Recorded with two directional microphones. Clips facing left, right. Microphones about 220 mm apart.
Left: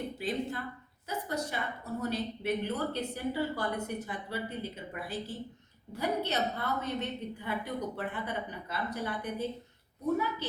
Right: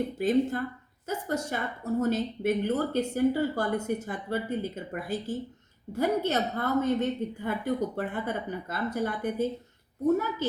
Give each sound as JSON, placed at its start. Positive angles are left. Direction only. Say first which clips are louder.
{"t": 0.2, "sound": "speech", "louder": "right 11 dB", "side_deg": -45}